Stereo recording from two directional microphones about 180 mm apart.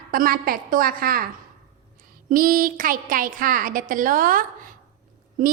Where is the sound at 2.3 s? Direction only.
50° right (ahead or behind).